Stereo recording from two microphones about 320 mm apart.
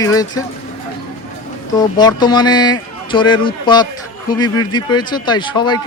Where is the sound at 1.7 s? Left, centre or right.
Centre.